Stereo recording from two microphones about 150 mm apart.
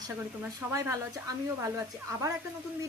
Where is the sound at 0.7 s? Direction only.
20° right (ahead or behind).